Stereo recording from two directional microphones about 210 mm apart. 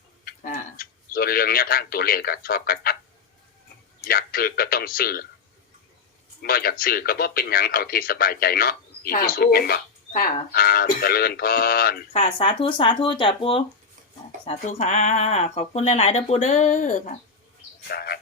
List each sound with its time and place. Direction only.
0.3 s tick-tock: 45° left (ahead or behind)
4.0 s speech: 45° left (ahead or behind)
6.4 s speech: 45° left (ahead or behind)
12.1 s speech: 25° left (ahead or behind)
17.8 s bird: 50° left (ahead or behind)